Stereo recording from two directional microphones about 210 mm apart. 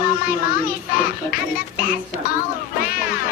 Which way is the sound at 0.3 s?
40° left (ahead or behind).